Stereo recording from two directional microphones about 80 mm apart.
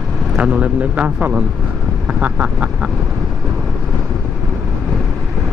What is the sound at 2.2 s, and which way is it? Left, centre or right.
Duck, centre.